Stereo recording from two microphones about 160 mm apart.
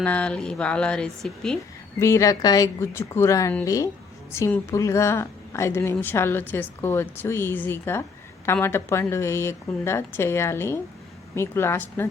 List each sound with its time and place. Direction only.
0.0 s speech: 10° left (ahead or behind)
2.0 s a woman's voice: 20° left (ahead or behind)